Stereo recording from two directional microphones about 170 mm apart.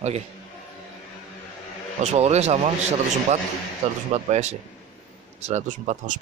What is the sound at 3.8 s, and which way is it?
Speech, 40° right (ahead or behind).